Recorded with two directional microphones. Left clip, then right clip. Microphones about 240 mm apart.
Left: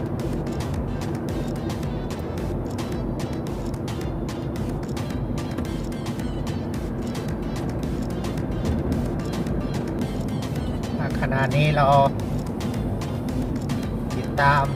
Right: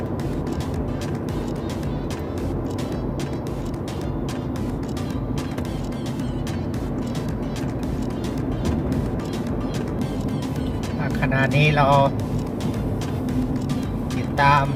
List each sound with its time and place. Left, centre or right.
11.2 s speech: centre
14.3 s vehicle: centre